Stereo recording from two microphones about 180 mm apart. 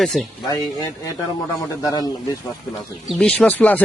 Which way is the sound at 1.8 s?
20° left (ahead or behind).